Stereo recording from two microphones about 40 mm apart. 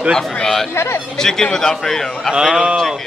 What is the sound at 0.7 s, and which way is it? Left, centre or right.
Speech, left.